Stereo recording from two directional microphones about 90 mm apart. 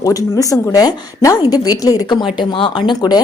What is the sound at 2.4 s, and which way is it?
Speech, 65° left (ahead or behind).